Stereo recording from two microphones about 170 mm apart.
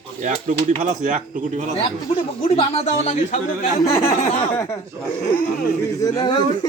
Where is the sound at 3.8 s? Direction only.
15° left (ahead or behind).